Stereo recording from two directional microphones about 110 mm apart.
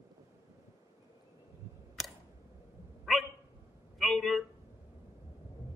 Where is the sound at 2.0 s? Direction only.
Centre (ahead or behind).